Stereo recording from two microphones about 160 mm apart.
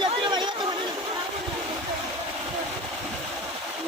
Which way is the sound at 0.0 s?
30° right (ahead or behind).